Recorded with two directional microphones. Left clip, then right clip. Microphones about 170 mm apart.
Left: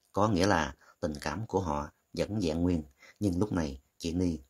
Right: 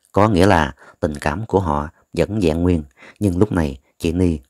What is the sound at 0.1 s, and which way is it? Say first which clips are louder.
Speech: right 13 dB; 45° right (ahead or behind).